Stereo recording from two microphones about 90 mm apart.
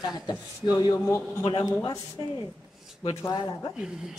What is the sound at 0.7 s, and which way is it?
A woman's voice, 45° left (ahead or behind).